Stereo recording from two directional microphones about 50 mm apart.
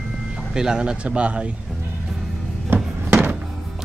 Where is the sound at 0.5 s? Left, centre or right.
Centre.